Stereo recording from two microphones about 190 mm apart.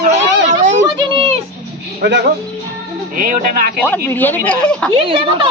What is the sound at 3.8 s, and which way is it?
Speech, 10° left (ahead or behind).